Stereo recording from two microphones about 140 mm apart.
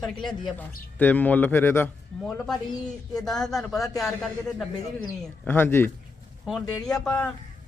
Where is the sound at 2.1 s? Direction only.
Centre (ahead or behind).